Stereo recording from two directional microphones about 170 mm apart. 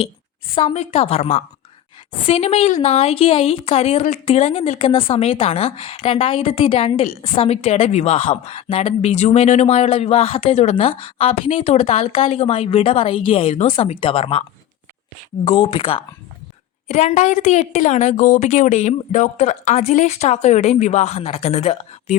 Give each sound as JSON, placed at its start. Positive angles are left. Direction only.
{"t": 0.5, "sound": "a woman's voice", "side_deg": 35}
{"t": 15.4, "sound": "a woman's voice", "side_deg": 35}